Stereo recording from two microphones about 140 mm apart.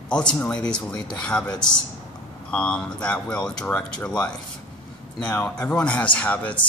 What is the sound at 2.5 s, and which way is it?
Speech, 5° left (ahead or behind).